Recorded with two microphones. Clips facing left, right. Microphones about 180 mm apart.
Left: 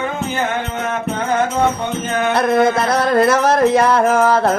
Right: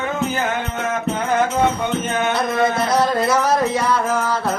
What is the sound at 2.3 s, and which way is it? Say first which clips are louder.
Music: left 7 dB; 60° left (ahead or behind).